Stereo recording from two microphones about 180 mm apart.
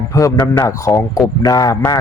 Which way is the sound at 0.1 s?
20° left (ahead or behind).